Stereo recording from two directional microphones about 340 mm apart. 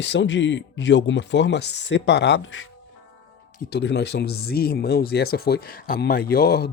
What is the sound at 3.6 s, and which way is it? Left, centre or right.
Speech, left.